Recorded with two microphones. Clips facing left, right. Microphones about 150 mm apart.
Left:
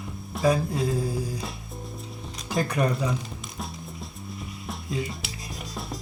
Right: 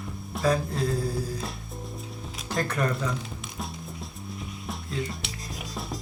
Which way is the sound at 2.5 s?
10° left (ahead or behind).